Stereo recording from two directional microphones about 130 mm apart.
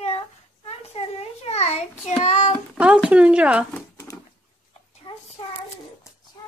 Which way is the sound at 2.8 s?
10° right (ahead or behind).